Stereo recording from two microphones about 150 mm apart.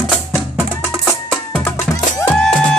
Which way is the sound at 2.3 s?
5° left (ahead or behind).